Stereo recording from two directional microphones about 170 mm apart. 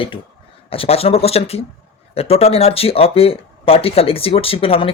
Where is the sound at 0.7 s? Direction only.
35° left (ahead or behind).